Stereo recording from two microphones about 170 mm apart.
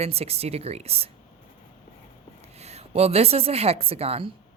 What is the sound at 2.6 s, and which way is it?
A woman's voice, 40° right (ahead or behind).